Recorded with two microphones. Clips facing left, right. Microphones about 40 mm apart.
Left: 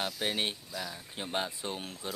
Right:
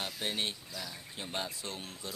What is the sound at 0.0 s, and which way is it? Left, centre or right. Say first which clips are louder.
Speech: left 3 dB; left.